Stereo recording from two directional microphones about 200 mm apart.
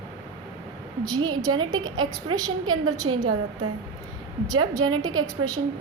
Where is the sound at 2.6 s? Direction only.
90° right.